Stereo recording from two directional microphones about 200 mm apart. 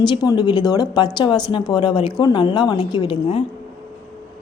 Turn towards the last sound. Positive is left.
turn(degrees=30)  # may be behind; listen again after turning